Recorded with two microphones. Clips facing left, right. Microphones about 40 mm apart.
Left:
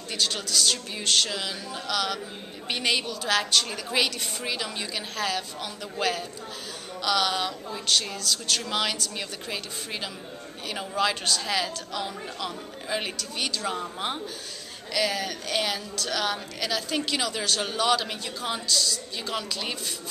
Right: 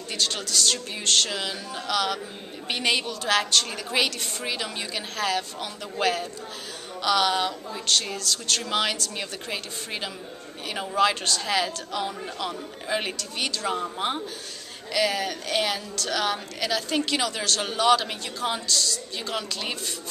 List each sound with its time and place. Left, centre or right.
0.1 s a woman's voice: centre